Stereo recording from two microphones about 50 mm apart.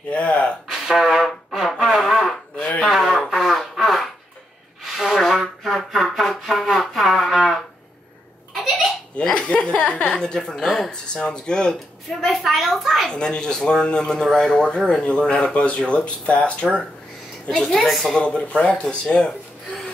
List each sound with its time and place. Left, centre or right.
0.1 s speech: left
0.7 s a sound: centre
1.2 s brass instrument: centre
1.9 s a sound: centre
9.1 s a sound: centre
10.6 s speech: centre
12.2 s a woman's voice: centre
13.1 s speech: centre
17.5 s speech: centre
17.7 s a woman's voice: centre
18.1 s speech: centre